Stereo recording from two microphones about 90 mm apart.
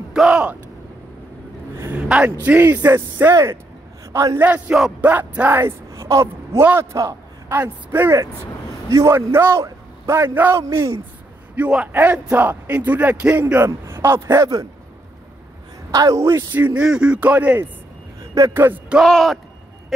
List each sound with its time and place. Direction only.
0.1 s a sound: 10° right (ahead or behind)
2.0 s a man's voice: 15° right (ahead or behind)
4.4 s a man's voice: 20° right (ahead or behind)
5.6 s speech: 30° right (ahead or behind)
7.5 s a man's voice: 20° right (ahead or behind)
15.9 s speech: 40° right (ahead or behind)
16.5 s a man's voice: 20° right (ahead or behind)
18.2 s vehicle: 40° right (ahead or behind)
18.5 s a man's voice: 25° right (ahead or behind)
19.0 s speech: 5° left (ahead or behind)